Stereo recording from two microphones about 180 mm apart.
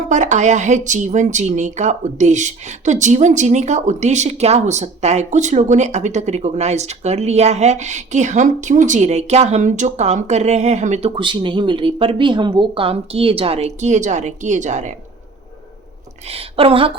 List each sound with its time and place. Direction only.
0.1 s speech: 45° right (ahead or behind)
16.2 s speech: 35° right (ahead or behind)